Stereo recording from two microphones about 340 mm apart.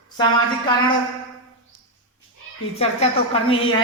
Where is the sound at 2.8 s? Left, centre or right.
Centre.